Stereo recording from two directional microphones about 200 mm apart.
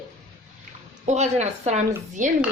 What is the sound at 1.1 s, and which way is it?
Speech, 35° right (ahead or behind).